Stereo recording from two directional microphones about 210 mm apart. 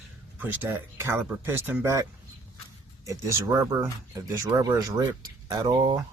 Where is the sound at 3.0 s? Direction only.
15° right (ahead or behind).